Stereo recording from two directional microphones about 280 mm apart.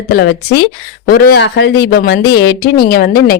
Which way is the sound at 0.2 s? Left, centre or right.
Left.